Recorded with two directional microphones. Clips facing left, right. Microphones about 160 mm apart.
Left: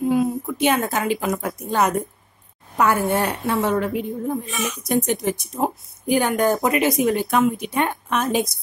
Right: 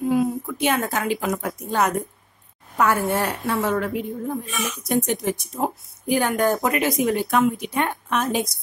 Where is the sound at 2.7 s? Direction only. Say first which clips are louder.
Left 1 dB; 15° left (ahead or behind).